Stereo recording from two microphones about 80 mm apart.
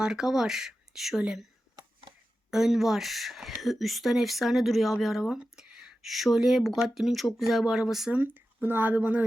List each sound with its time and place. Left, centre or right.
0.0 s speech: centre
2.5 s speech: centre
8.1 s speech: right